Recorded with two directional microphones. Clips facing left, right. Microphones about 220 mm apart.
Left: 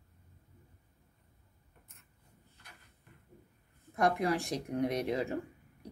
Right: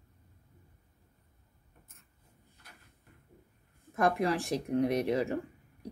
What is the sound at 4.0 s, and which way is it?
Speech, 35° right (ahead or behind).